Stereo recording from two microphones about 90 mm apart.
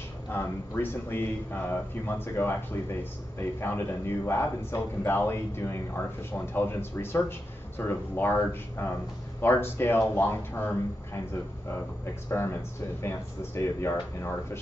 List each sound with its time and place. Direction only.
0.3 s speech: 25° left (ahead or behind)
13.6 s speech: 30° left (ahead or behind)